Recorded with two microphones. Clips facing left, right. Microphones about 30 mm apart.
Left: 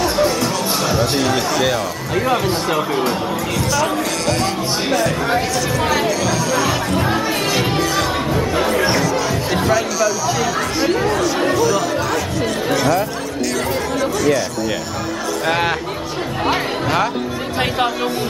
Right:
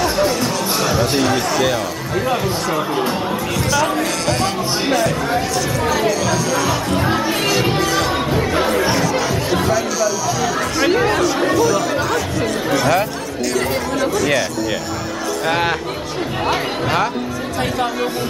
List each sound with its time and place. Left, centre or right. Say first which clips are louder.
0.0 s music: even; centre
1.1 s speech: right 1 dB; centre
3.5 s speech: right 1 dB; centre
7.7 s music: right 1 dB; centre
8.3 s chatter: right 1 dB; centre
9.1 s music: right 1 dB; centre
10.9 s speech: right 3 dB; centre
15.4 s speech: even; centre
16.8 s speech: even; centre